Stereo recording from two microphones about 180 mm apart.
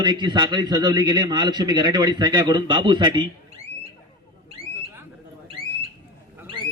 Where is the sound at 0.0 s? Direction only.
25° right (ahead or behind).